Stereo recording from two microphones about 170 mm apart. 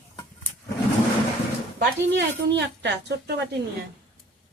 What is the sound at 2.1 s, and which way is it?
Speech, 90° right.